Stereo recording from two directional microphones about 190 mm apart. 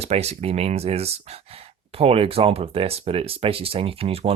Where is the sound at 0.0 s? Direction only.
35° right (ahead or behind).